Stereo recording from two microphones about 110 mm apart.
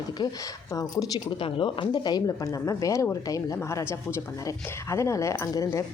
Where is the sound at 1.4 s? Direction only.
50° left (ahead or behind); by 3.8 s 30° left (ahead or behind).